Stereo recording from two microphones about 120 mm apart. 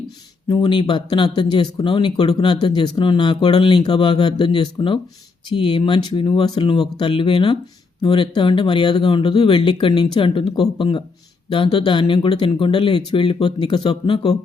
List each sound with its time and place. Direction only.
0.4 s speech: 40° left (ahead or behind)